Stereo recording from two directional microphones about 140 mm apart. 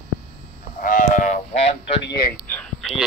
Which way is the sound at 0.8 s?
70° left (ahead or behind).